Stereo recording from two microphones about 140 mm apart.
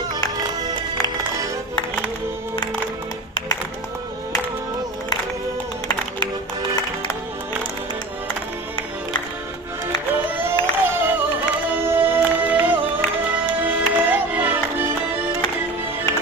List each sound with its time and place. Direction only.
10.1 s music: 15° right (ahead or behind)
10.6 s a sound: 15° right (ahead or behind)
11.7 s music: 15° right (ahead or behind)